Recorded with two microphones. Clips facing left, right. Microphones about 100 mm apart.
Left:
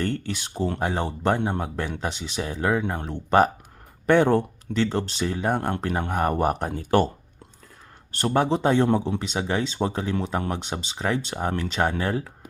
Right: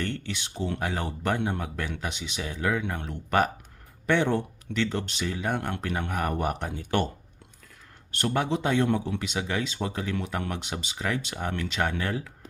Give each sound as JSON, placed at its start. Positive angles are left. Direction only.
{"t": 0.0, "sound": "speech", "side_deg": 40}
{"t": 0.8, "sound": "speech", "side_deg": 30}
{"t": 4.0, "sound": "speech", "side_deg": 45}
{"t": 8.1, "sound": "speech", "side_deg": 35}